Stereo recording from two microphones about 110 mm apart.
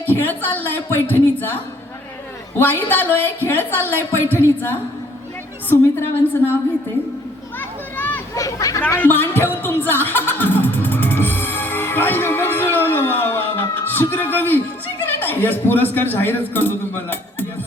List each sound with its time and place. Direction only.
0.0 s a woman's voice: 15° left (ahead or behind)
2.6 s a man's voice: 20° left (ahead or behind)
7.9 s a sound: 15° left (ahead or behind)
8.4 s speech: 30° left (ahead or behind)
9.0 s music: 20° left (ahead or behind)
15.0 s a man's voice: 15° left (ahead or behind)